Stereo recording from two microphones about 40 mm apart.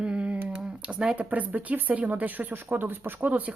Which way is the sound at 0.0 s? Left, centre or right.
Right.